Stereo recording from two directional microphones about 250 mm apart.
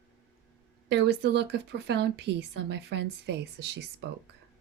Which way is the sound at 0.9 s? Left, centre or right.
Right.